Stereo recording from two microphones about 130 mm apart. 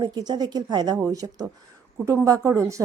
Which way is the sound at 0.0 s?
30° right (ahead or behind).